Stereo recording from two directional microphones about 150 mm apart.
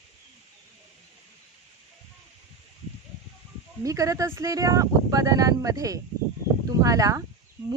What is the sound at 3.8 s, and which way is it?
Speech, 20° right (ahead or behind).